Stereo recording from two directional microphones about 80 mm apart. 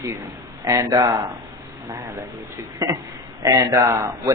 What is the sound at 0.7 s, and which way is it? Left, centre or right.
Speech, right.